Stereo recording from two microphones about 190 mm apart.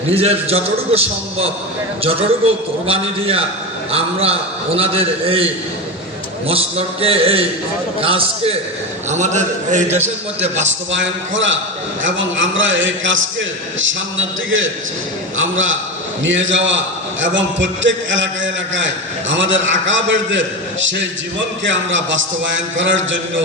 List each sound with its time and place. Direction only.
0.1 s a man's voice: 30° right (ahead or behind)
2.8 s a man's voice: 30° right (ahead or behind)
6.5 s a man's voice: 30° right (ahead or behind)
10.5 s a man's voice: 75° right (ahead or behind)